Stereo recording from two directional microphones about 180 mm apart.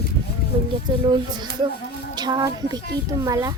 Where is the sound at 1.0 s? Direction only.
25° right (ahead or behind).